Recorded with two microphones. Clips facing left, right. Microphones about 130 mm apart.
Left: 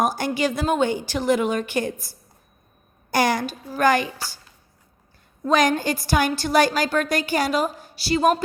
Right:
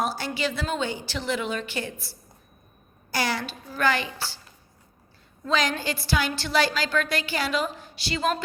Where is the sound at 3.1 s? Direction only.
50° left (ahead or behind).